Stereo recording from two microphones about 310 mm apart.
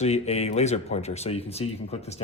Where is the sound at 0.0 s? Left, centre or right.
Left.